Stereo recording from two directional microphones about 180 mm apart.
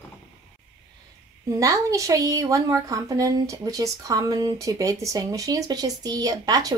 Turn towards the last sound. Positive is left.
turn(degrees=-20)  # may be behind; listen again after turning